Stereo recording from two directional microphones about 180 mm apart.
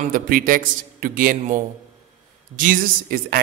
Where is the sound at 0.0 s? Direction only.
50° right (ahead or behind).